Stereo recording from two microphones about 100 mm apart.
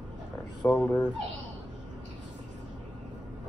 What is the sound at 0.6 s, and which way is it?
Speech, 20° left (ahead or behind).